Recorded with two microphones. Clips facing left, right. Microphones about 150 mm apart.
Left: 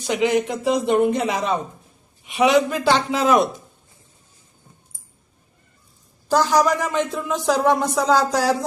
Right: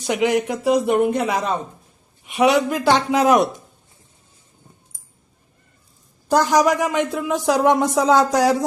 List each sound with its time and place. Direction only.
0.0 s speech: 15° right (ahead or behind)
6.2 s speech: 15° right (ahead or behind)